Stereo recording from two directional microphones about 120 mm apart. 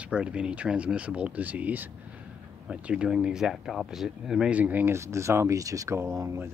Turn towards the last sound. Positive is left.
turn(degrees=-25)  # may be behind; listen again after turning